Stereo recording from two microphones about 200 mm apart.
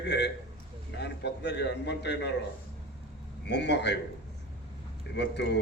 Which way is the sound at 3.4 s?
60° left (ahead or behind).